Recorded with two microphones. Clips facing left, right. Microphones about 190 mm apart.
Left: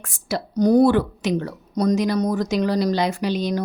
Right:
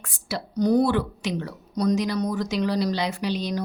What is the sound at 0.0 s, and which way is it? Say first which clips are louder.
A woman's voice: left 5 dB; 45° left (ahead or behind).